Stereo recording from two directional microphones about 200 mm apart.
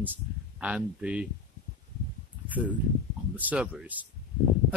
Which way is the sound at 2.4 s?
10° right (ahead or behind).